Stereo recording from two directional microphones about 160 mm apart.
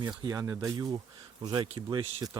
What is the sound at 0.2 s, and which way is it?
Speech, 20° right (ahead or behind).